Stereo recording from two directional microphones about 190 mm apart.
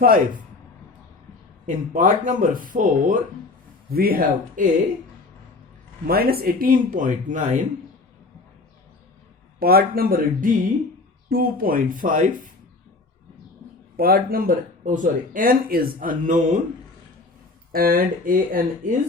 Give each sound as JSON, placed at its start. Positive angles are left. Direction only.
{"t": 0.0, "sound": "speech", "side_deg": -45}
{"t": 1.6, "sound": "speech", "side_deg": -45}
{"t": 6.1, "sound": "speech", "side_deg": -50}
{"t": 9.6, "sound": "speech", "side_deg": -50}
{"t": 13.9, "sound": "speech", "side_deg": -50}
{"t": 17.7, "sound": "speech", "side_deg": -50}